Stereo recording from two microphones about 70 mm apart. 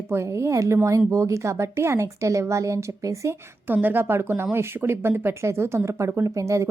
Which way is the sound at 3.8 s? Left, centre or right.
Right.